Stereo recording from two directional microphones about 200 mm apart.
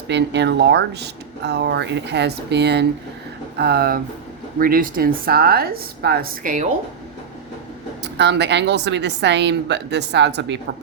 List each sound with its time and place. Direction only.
0.1 s a woman's voice: 60° right (ahead or behind); by 6.7 s 40° right (ahead or behind)
8.0 s speech: 60° right (ahead or behind)